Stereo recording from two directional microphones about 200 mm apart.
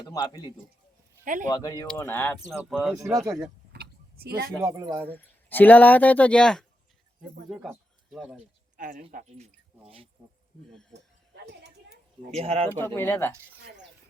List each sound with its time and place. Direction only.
0.0 s a man's voice: 20° left (ahead or behind)
1.2 s a man's voice: 40° right (ahead or behind)
1.5 s speech: 20° left (ahead or behind)
2.6 s speech: centre (ahead or behind)
2.9 s speech: 15° right (ahead or behind)
3.7 s vehicle: 50° right (ahead or behind)
4.6 s speech: 15° right (ahead or behind)
5.0 s speech: 10° left (ahead or behind)
8.8 s speech: 45° right (ahead or behind)
9.8 s speech: 30° right (ahead or behind)
10.7 s speech: 5° left (ahead or behind)
10.9 s a sound: 55° right (ahead or behind)
12.3 s speech: 30° right (ahead or behind)
12.7 s speech: 10° left (ahead or behind)